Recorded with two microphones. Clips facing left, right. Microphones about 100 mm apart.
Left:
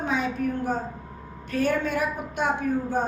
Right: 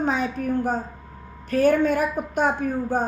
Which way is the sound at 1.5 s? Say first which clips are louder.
Right 6 dB; 45° right (ahead or behind).